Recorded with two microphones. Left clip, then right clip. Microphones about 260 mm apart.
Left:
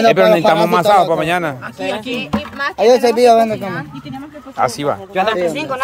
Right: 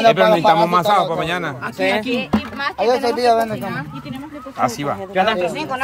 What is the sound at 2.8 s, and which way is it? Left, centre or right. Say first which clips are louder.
Speech: left 7 dB; left.